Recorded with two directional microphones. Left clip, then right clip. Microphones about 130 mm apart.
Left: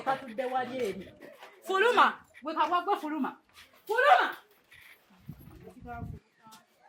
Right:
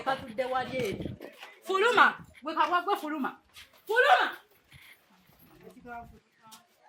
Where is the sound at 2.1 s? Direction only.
5° right (ahead or behind).